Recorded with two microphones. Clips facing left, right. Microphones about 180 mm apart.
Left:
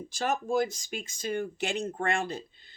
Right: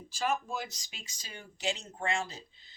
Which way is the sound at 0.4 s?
50° left (ahead or behind).